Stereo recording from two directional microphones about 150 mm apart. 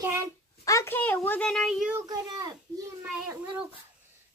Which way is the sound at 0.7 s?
15° left (ahead or behind).